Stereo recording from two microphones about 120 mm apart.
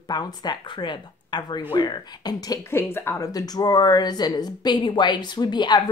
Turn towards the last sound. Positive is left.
turn(degrees=40)  # may be behind; listen again after turning